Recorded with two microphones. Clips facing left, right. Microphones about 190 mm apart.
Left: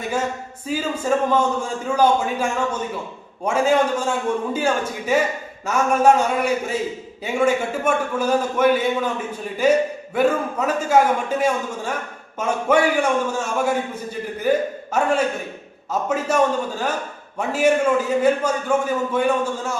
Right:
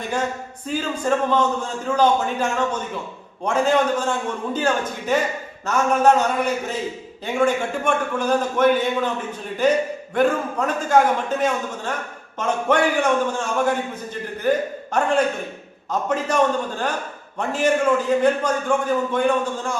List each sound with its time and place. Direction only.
0.7 s a man's voice: 5° left (ahead or behind)